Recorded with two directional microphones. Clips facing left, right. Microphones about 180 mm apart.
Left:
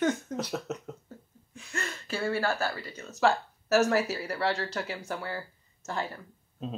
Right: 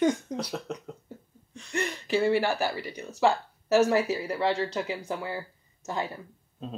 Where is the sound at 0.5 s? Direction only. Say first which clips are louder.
Left 1 dB; 5° left (ahead or behind).